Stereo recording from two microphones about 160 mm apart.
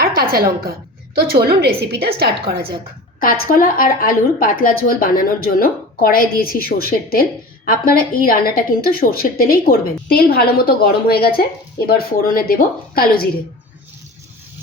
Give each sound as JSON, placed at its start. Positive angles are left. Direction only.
{"t": 0.0, "sound": "a sound", "side_deg": -70}
{"t": 1.2, "sound": "a woman's voice", "side_deg": -75}
{"t": 3.2, "sound": "a woman's voice", "side_deg": 65}